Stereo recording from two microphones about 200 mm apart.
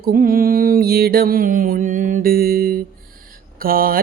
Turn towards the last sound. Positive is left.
turn(degrees=-45)  # may be behind; listen again after turning